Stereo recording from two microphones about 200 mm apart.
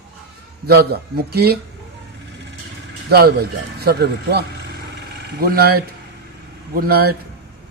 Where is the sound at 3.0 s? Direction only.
50° right (ahead or behind).